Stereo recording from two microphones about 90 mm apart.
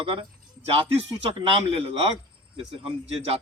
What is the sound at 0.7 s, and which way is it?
A man's voice, 90° right.